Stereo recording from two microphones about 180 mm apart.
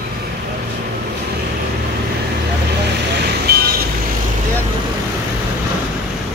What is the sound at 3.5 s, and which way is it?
Vehicle, 60° right (ahead or behind).